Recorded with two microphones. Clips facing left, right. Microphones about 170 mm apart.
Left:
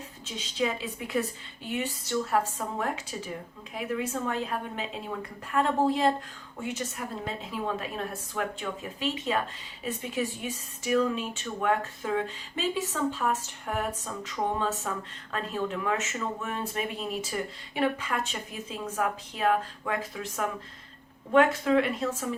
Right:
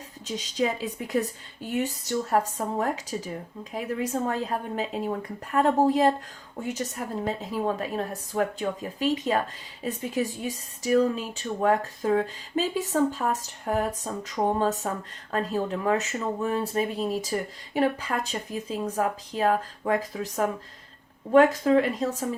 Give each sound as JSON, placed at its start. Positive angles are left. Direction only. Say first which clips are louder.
{"t": 0.3, "sound": "speech", "louder": "right 3 dB", "side_deg": -40}